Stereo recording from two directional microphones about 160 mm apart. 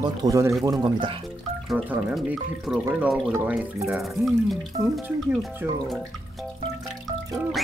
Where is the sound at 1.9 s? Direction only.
10° right (ahead or behind).